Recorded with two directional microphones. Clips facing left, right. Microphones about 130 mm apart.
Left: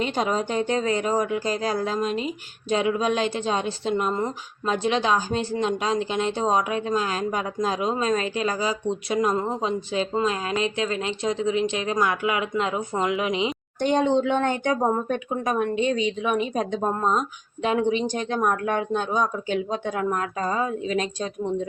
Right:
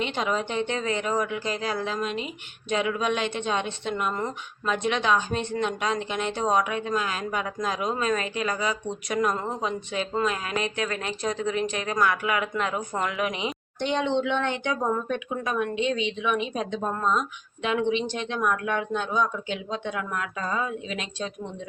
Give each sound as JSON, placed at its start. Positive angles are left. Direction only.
{"t": 0.0, "sound": "speech", "side_deg": 35}
{"t": 13.8, "sound": "speech", "side_deg": 40}